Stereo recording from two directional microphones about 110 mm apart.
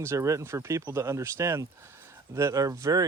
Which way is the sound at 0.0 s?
25° right (ahead or behind).